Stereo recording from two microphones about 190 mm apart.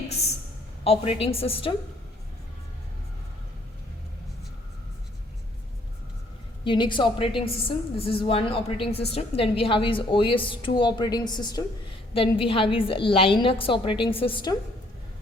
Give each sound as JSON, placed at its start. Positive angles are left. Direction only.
{"t": 0.9, "sound": "a woman's voice", "side_deg": 30}
{"t": 6.7, "sound": "a woman's voice", "side_deg": 25}